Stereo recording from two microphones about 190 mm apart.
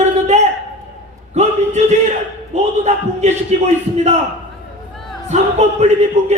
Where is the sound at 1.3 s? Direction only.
35° right (ahead or behind).